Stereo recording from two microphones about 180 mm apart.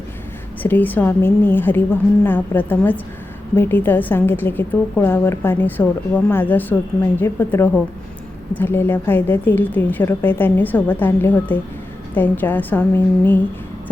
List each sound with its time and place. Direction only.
0.6 s a woman's voice: 10° left (ahead or behind)